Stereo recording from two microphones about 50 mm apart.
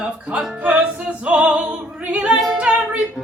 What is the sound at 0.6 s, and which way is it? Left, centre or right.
Music, right.